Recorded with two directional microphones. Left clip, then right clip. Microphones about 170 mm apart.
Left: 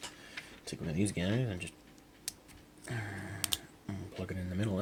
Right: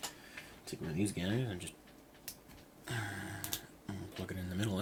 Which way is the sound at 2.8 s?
30° left (ahead or behind).